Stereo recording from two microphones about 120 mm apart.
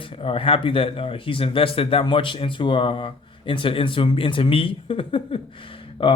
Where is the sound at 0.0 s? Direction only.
50° left (ahead or behind).